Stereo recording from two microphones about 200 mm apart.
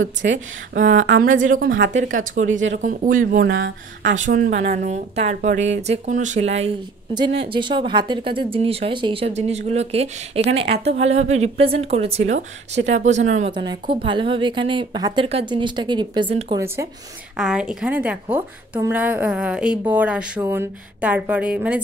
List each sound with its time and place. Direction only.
0.0 s speech: 65° right (ahead or behind)
0.7 s a woman's voice: 40° right (ahead or behind)
3.3 s speech: 65° right (ahead or behind)
4.0 s a woman's voice: 40° right (ahead or behind)
7.5 s a woman's voice: 25° right (ahead or behind)
13.5 s speech: 25° right (ahead or behind)
17.4 s a woman's voice: 5° right (ahead or behind)